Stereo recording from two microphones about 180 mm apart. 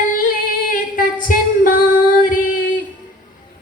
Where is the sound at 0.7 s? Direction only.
50° left (ahead or behind).